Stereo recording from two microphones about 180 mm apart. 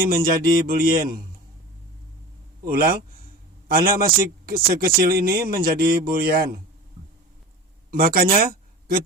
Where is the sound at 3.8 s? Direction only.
55° right (ahead or behind).